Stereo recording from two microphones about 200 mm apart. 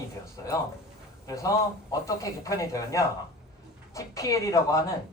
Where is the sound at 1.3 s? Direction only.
15° left (ahead or behind).